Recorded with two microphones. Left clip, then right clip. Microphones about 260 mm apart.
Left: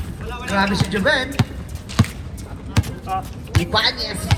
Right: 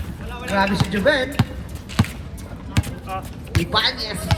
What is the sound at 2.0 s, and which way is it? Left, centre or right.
Basketball bounce, centre.